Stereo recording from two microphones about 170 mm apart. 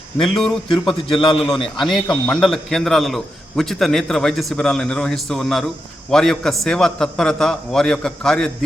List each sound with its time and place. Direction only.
0.2 s a man's voice: 5° left (ahead or behind)
1.0 s a man's voice: 30° left (ahead or behind)
1.8 s a man's voice: centre (ahead or behind)